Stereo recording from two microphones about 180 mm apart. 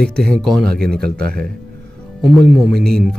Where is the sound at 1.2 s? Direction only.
55° right (ahead or behind).